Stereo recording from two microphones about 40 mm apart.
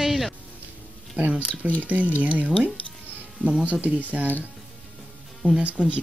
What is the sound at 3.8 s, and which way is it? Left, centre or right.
Speech, right.